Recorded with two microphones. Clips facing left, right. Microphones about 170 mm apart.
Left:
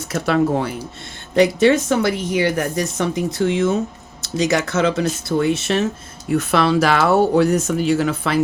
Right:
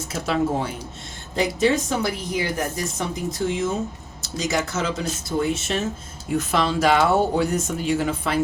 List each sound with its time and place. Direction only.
0.1 s speech: 65° left (ahead or behind)